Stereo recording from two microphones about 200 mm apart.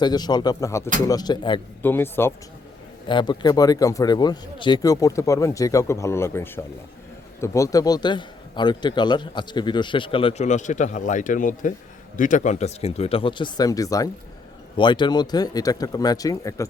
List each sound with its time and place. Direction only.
0.0 s a man's voice: 20° left (ahead or behind)
1.8 s a man's voice: 10° left (ahead or behind)
3.1 s a man's voice: 20° left (ahead or behind)